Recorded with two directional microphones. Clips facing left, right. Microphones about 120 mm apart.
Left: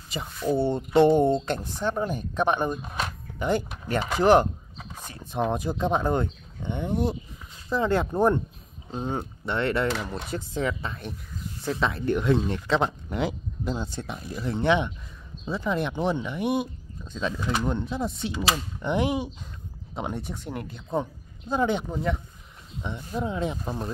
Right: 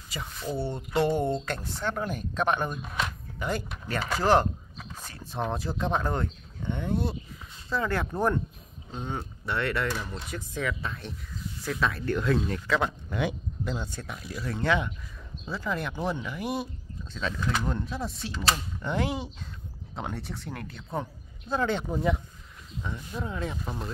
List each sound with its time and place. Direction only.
0.6 s speech: 25° left (ahead or behind)
8.9 s speech: 30° left (ahead or behind)
9.8 s speech: 80° left
10.3 s speech: 30° left (ahead or behind)
21.8 s speech: 5° right (ahead or behind)
22.8 s speech: 25° left (ahead or behind)